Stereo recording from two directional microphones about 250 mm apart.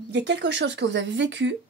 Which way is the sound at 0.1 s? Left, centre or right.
Right.